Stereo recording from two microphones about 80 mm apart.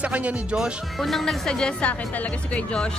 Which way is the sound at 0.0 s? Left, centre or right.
Centre.